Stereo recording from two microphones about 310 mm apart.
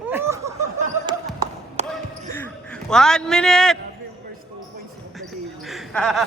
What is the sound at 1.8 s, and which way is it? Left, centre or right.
Basketball bounce, right.